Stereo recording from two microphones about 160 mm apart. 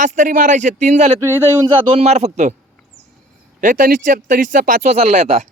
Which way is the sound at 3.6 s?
55° right (ahead or behind).